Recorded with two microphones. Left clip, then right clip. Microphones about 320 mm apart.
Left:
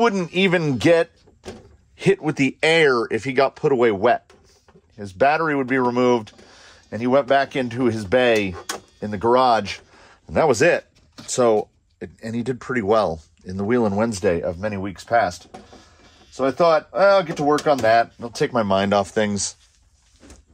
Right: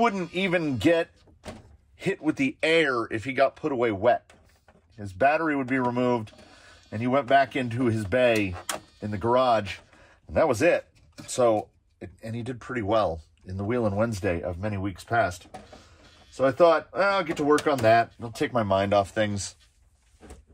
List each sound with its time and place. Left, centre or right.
0.0 s a man's voice: left
16.6 s speech: left